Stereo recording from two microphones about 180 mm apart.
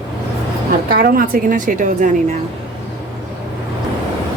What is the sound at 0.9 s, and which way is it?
A woman's voice, 55° right (ahead or behind).